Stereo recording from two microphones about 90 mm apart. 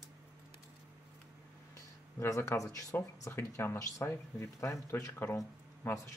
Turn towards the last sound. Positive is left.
turn(degrees=35)  # may be behind; listen again after turning